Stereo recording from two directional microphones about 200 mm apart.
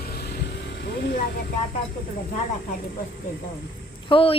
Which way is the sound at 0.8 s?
60° left (ahead or behind).